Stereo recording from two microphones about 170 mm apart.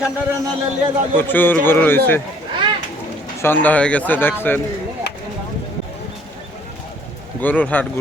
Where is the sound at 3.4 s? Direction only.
10° left (ahead or behind).